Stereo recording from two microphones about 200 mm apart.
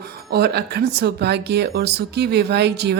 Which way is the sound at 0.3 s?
50° right (ahead or behind).